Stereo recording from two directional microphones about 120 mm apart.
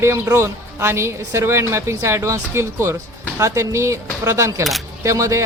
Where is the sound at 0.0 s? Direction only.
25° right (ahead or behind).